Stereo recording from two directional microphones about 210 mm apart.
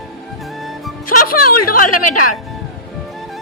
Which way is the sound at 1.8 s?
90° left.